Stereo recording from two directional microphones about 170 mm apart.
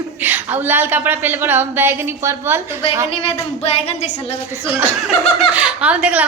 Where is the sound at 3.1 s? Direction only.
35° left (ahead or behind).